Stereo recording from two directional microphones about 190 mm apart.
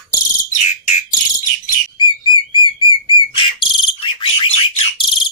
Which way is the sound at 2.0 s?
25° left (ahead or behind).